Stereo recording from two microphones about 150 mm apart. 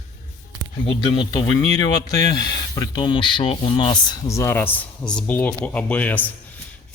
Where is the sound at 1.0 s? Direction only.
30° left (ahead or behind).